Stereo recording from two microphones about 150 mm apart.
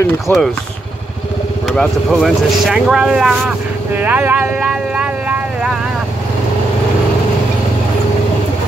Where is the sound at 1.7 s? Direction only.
Centre (ahead or behind).